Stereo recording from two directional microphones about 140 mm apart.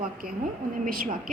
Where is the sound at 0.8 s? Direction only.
80° right.